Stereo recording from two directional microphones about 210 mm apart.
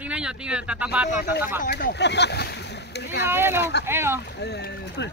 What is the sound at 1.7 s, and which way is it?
Speech, 50° left (ahead or behind).